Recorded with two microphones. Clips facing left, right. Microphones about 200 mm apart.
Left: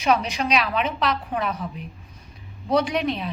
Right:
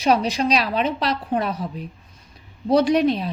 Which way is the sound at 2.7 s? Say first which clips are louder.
Right 5 dB; 35° right (ahead or behind).